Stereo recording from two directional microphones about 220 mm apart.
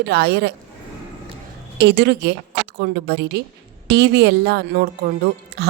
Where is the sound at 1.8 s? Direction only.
50° right (ahead or behind).